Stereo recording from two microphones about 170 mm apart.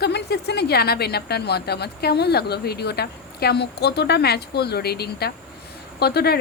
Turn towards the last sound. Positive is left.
turn(degrees=70)  # may be behind; listen again after turning